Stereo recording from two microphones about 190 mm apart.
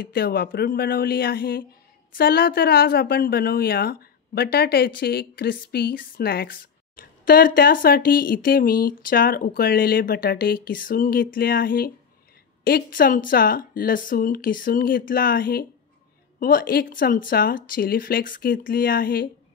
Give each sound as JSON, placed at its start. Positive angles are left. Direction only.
{"t": 0.0, "sound": "speech", "side_deg": 50}